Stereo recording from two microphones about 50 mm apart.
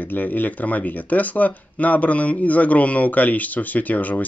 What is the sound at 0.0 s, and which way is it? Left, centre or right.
Speech, left.